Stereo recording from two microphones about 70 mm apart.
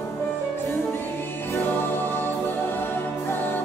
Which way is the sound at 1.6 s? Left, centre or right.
Left.